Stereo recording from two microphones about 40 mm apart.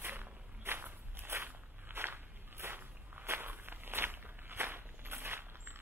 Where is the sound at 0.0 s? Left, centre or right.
Right.